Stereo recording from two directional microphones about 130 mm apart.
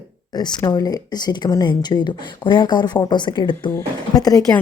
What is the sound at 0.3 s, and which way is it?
Speech, 30° left (ahead or behind).